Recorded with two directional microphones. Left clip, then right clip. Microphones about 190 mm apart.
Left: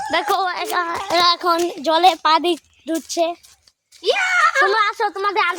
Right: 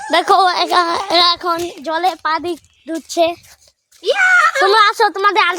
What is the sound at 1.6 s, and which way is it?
Speech, 15° left (ahead or behind).